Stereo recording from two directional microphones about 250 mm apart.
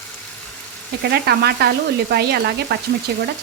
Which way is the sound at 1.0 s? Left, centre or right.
Right.